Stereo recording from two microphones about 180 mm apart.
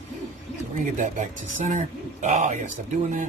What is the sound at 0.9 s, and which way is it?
Speech, 45° right (ahead or behind).